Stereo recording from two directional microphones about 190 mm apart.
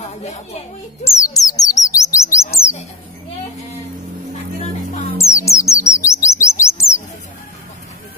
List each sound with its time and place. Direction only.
0.2 s speech: 35° left (ahead or behind)
1.0 s speech: 15° left (ahead or behind)
5.1 s music: 15° left (ahead or behind)
5.9 s chirp: 15° left (ahead or behind)